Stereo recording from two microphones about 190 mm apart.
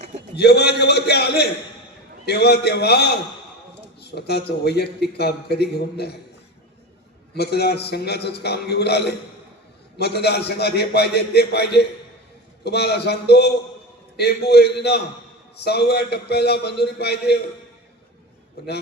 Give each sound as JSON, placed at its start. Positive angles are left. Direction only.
{"t": 0.3, "sound": "a man's voice", "side_deg": 60}
{"t": 7.3, "sound": "a man's voice", "side_deg": 60}